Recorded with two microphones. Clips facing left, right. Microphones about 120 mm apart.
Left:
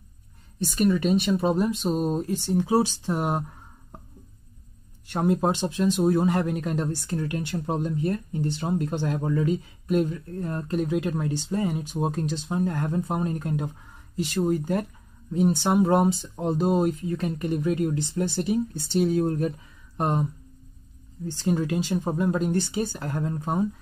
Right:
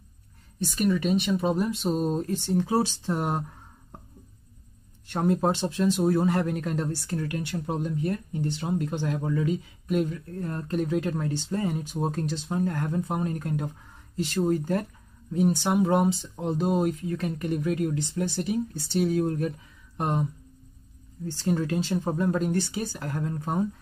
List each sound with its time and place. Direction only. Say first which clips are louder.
0.6 s speech: left 2 dB; 35° left (ahead or behind); by 3.4 s 15° left (ahead or behind)
5.1 s speech: left 1 dB; 15° left (ahead or behind); by 10.0 s 40° left (ahead or behind)
10.4 s speech: left 1 dB; 15° left (ahead or behind)
14.1 s speech: left 1 dB; 10° left (ahead or behind)
15.3 s speech: left 2 dB; 25° left (ahead or behind)
21.5 s speech: left 1 dB; 15° left (ahead or behind)